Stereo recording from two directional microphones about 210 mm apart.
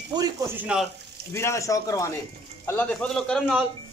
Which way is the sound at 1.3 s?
15° left (ahead or behind).